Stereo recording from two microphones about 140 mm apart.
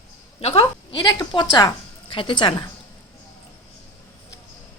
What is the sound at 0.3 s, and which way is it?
A woman's voice, 45° left (ahead or behind).